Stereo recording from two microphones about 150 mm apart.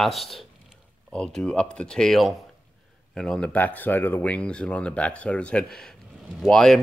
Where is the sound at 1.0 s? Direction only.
5° left (ahead or behind).